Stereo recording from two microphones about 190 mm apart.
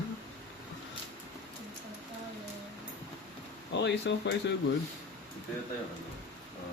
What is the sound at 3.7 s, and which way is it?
Speech, 70° left (ahead or behind).